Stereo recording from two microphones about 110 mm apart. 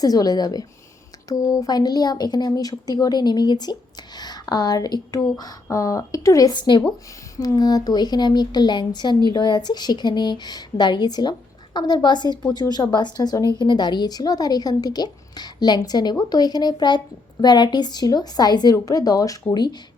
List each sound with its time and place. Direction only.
0.0 s a woman's voice: 35° left (ahead or behind)